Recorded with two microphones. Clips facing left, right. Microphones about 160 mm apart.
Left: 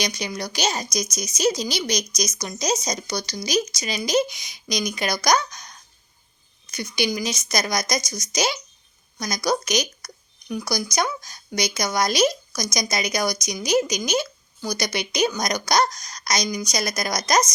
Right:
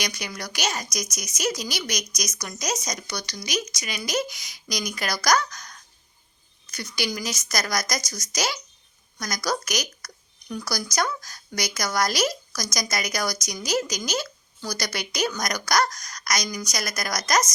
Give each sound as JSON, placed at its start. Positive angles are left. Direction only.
{"t": 0.0, "sound": "speech", "side_deg": 25}
{"t": 6.7, "sound": "speech", "side_deg": 20}